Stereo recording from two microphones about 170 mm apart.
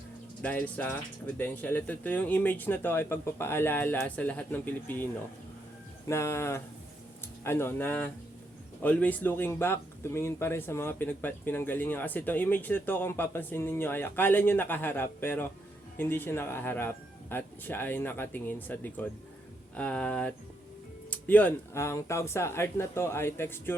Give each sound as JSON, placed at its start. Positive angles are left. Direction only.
{"t": 0.4, "sound": "speech", "side_deg": 10}
{"t": 6.1, "sound": "speech", "side_deg": 15}